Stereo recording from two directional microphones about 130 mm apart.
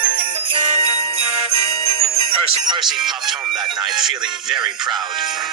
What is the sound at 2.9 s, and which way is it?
Speech, 5° right (ahead or behind).